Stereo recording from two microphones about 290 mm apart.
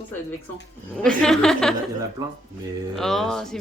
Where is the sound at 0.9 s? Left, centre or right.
Centre.